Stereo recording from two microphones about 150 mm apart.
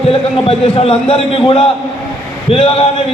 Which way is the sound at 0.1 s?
40° left (ahead or behind).